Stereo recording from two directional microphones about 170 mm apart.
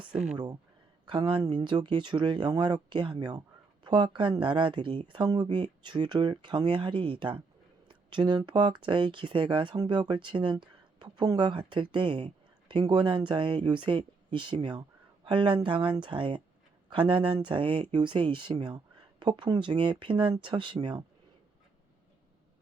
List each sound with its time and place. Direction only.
1.0 s speech: 30° right (ahead or behind)